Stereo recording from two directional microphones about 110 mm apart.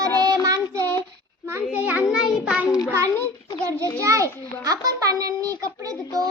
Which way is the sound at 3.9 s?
25° right (ahead or behind).